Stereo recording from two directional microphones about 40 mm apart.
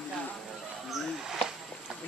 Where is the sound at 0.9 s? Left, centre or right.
Centre.